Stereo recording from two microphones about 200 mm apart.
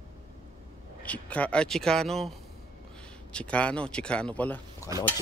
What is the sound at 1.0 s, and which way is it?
Speech, 5° left (ahead or behind).